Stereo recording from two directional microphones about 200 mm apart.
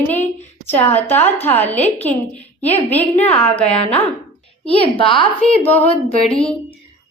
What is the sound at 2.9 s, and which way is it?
Speech, 10° left (ahead or behind).